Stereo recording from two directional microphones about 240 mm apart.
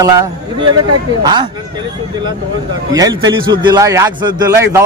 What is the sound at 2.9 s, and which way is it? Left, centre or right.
A man's voice, centre.